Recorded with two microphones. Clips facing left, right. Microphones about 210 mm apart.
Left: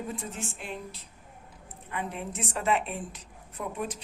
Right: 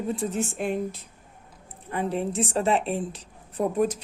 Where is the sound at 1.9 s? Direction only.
35° right (ahead or behind).